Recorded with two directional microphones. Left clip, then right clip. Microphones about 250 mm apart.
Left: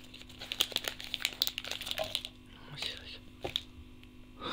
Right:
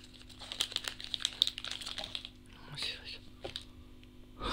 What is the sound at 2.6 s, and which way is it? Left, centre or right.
Whispering, centre.